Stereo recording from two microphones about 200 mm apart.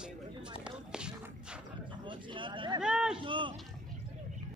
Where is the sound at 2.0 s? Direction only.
25° right (ahead or behind).